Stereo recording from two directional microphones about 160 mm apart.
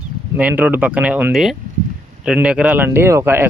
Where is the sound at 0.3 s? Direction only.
10° right (ahead or behind).